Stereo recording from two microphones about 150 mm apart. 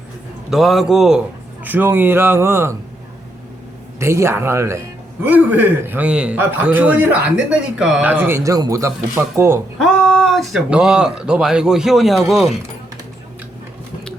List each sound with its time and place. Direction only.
0.5 s a man's voice: centre (ahead or behind); by 2.7 s 15° right (ahead or behind)
4.0 s a man's voice: 20° right (ahead or behind)
9.7 s speech: 5° left (ahead or behind)